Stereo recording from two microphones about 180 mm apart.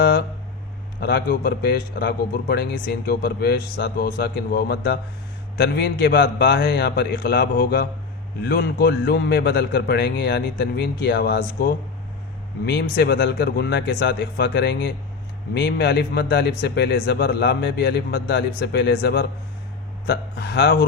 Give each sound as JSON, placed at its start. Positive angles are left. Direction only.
{"t": 0.0, "sound": "a man's voice", "side_deg": 60}
{"t": 12.6, "sound": "a man's voice", "side_deg": 70}